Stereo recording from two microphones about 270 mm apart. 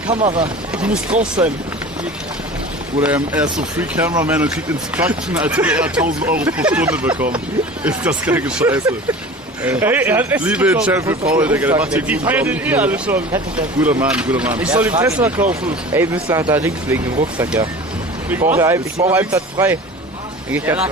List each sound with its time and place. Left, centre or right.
0.1 s speech: right
0.8 s speech: centre
3.3 s speech: centre